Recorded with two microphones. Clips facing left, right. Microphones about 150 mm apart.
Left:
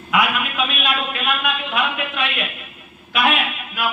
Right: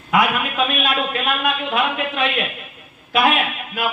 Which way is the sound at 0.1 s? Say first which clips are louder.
Right 2 dB; 40° right (ahead or behind).